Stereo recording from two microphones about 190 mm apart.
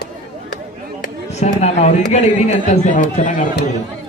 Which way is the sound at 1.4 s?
35° left (ahead or behind).